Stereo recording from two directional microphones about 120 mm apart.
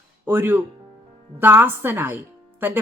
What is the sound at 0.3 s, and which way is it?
A woman's voice, 20° right (ahead or behind).